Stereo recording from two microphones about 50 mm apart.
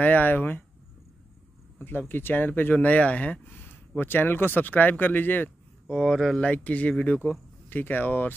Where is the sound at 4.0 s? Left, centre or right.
Left.